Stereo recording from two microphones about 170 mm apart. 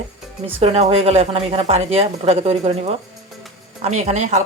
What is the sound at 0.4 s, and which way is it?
Speech, 35° right (ahead or behind).